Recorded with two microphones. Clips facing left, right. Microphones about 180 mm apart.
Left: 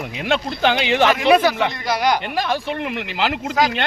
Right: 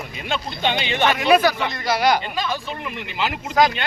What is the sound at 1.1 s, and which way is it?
Speech, 25° left (ahead or behind).